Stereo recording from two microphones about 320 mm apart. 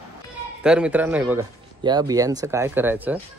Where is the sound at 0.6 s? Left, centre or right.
Centre.